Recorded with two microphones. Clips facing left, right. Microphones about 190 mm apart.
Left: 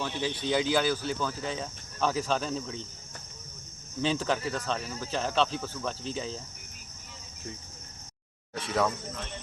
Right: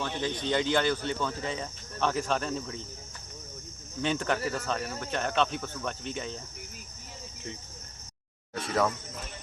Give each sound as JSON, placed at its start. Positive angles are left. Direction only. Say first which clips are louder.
{"t": 0.0, "sound": "speech", "louder": "even", "side_deg": 5}
{"t": 4.0, "sound": "speech", "louder": "even", "side_deg": 0}
{"t": 8.6, "sound": "speech", "louder": "even", "side_deg": 0}